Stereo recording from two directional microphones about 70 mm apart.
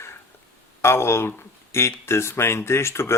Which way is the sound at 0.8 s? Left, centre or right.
Left.